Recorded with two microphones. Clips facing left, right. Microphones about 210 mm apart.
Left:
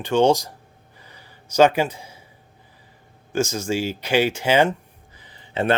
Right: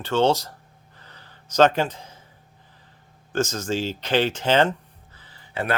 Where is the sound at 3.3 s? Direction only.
10° left (ahead or behind).